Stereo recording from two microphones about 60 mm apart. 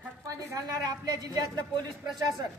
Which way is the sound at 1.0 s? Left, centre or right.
Right.